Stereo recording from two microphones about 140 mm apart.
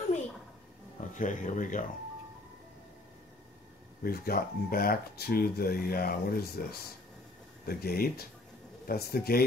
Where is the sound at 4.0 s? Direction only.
90° left.